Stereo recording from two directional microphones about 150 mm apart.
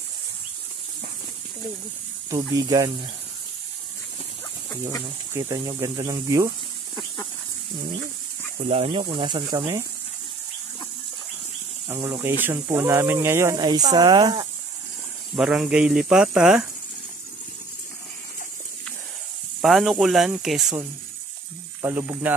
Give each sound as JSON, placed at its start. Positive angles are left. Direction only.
{"t": 2.2, "sound": "speech", "side_deg": -25}
{"t": 5.3, "sound": "speech", "side_deg": -25}
{"t": 8.6, "sound": "speech", "side_deg": -40}
{"t": 11.9, "sound": "speech", "side_deg": -20}
{"t": 15.3, "sound": "speech", "side_deg": -5}
{"t": 19.6, "sound": "speech", "side_deg": 0}
{"t": 21.8, "sound": "speech", "side_deg": -20}